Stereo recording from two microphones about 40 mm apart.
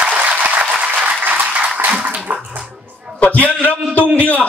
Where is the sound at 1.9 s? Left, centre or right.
Right.